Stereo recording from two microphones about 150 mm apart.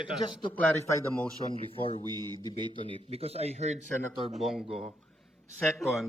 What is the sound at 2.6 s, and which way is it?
Speech, 40° right (ahead or behind).